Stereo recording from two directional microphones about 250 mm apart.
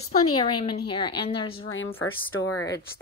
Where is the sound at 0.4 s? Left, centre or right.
Centre.